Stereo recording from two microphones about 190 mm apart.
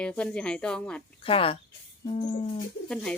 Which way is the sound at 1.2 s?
30° left (ahead or behind).